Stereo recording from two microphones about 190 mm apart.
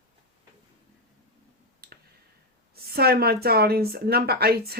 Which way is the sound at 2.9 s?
55° right (ahead or behind).